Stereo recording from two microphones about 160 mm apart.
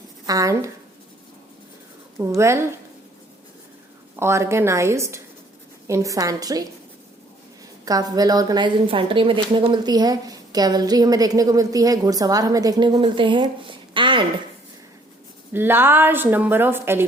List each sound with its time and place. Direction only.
0.3 s a woman's voice: 20° right (ahead or behind)
2.1 s speech: 20° right (ahead or behind)
4.2 s a woman's voice: 15° right (ahead or behind)
7.9 s a woman's voice: 25° right (ahead or behind)
15.5 s speech: 15° right (ahead or behind)